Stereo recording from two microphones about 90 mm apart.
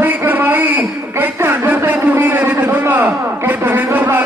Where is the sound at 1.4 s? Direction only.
20° right (ahead or behind).